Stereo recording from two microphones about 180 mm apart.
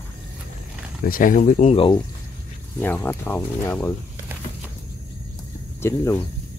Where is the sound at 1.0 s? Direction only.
50° left (ahead or behind); by 2.0 s 30° left (ahead or behind).